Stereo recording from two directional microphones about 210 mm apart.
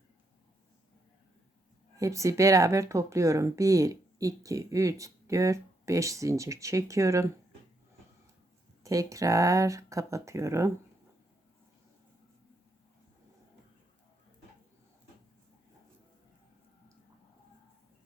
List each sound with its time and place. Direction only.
2.0 s speech: 15° right (ahead or behind)
8.8 s speech: 15° right (ahead or behind)